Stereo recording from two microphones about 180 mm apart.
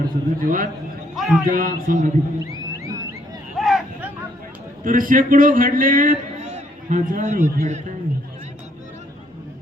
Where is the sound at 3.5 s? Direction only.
Centre (ahead or behind).